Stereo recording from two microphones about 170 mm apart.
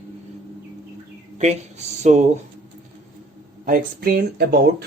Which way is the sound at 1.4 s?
40° right (ahead or behind).